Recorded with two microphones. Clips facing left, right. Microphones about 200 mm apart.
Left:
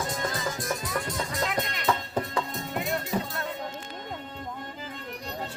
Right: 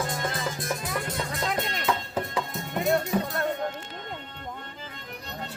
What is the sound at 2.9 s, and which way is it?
Music, 55° right (ahead or behind).